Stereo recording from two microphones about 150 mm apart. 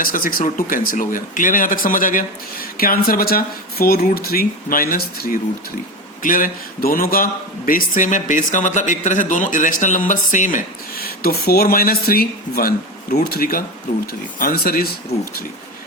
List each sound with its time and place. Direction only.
0.0 s speech: 70° left (ahead or behind)
2.7 s a man's voice: 75° left (ahead or behind)